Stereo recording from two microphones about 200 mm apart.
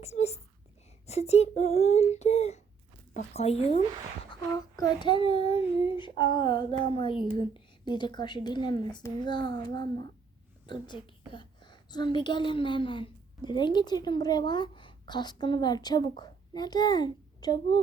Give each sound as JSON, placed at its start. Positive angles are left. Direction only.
{"t": 0.0, "sound": "speech", "side_deg": 35}
{"t": 4.3, "sound": "a sound", "side_deg": 20}
{"t": 4.9, "sound": "a woman's voice", "side_deg": 25}